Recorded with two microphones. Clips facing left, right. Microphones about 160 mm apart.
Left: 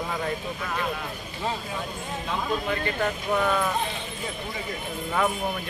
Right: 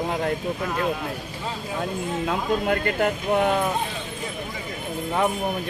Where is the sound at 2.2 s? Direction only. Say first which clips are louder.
Right 4 dB; 60° right (ahead or behind).